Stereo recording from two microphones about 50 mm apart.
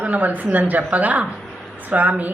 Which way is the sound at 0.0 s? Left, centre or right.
Right.